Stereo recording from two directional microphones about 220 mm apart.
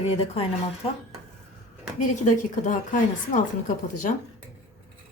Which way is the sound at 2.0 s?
35° left (ahead or behind).